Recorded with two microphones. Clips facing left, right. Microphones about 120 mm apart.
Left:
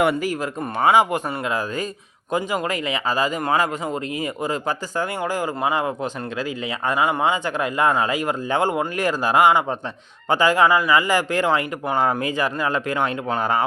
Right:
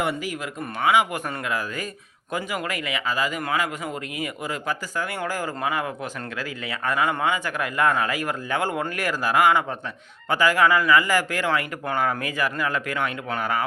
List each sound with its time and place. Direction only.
0.8 s speech: 40° left (ahead or behind)
1.1 s speech: 25° left (ahead or behind)
5.2 s speech: 20° left (ahead or behind)